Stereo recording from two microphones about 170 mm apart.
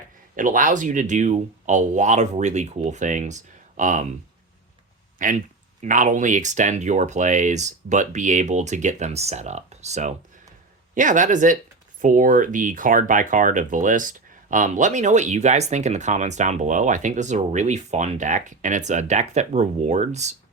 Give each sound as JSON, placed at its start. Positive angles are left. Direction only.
{"t": 0.3, "sound": "speech", "side_deg": -50}
{"t": 5.2, "sound": "speech", "side_deg": -50}